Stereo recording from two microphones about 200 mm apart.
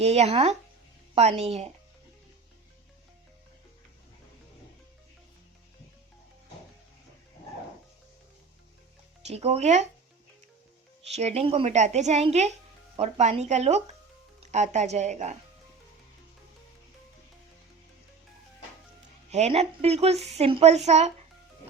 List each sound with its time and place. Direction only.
0.0 s a woman's voice: 30° right (ahead or behind)
9.2 s a woman's voice: 30° right (ahead or behind)
11.1 s a woman's voice: 30° right (ahead or behind)
19.3 s a woman's voice: 35° right (ahead or behind)
20.1 s speech: centre (ahead or behind)
20.4 s a woman's voice: 30° right (ahead or behind)